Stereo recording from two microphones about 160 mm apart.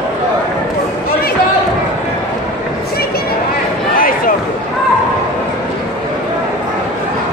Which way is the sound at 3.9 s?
60° left (ahead or behind).